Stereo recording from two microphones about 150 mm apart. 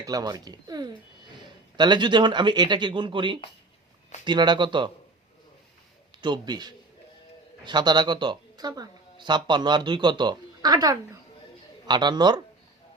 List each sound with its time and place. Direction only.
0.0 s speech: 25° right (ahead or behind)
6.2 s speech: 30° right (ahead or behind)